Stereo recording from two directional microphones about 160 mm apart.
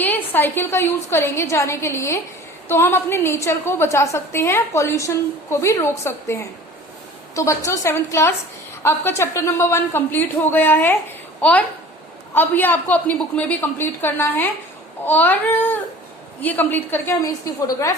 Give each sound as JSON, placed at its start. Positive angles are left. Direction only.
{"t": 0.0, "sound": "a woman's voice", "side_deg": 10}